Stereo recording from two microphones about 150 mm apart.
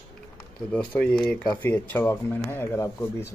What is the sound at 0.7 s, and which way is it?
Speech, 10° left (ahead or behind).